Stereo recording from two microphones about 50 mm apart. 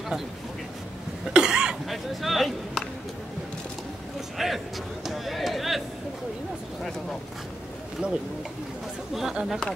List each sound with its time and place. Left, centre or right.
1.3 s cough: centre
1.9 s speech: centre
4.4 s a man's voice: centre
5.0 s a sound: centre
8.0 s speech: centre